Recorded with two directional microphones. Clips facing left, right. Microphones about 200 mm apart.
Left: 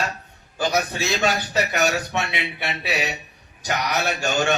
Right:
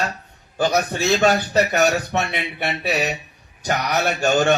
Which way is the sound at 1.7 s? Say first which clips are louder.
Right 4 dB; 40° right (ahead or behind).